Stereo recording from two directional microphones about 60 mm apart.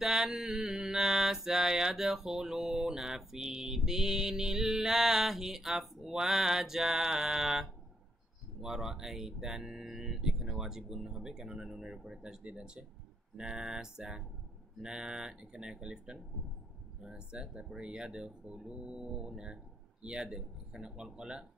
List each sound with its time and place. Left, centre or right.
0.0 s mantra: centre
8.5 s speech: centre